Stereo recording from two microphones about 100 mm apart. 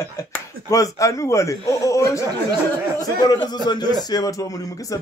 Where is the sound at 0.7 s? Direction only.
35° left (ahead or behind).